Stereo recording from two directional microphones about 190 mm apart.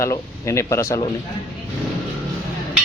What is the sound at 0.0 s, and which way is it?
A man's voice, 15° left (ahead or behind).